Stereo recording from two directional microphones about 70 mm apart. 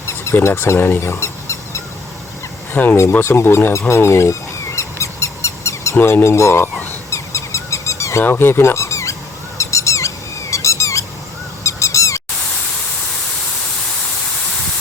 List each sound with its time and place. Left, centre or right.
0.4 s speech: left
2.7 s speech: left
3.0 s fowl: left
6.0 s speech: left
7.1 s a sound: left
8.2 s speech: left
9.6 s squeak: left